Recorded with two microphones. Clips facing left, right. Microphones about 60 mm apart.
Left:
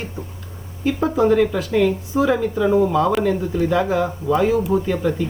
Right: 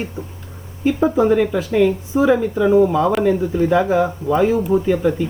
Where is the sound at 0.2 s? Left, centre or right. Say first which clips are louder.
Right 2 dB; centre.